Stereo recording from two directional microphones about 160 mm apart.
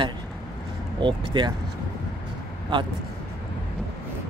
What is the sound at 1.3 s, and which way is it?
Speech, 25° right (ahead or behind).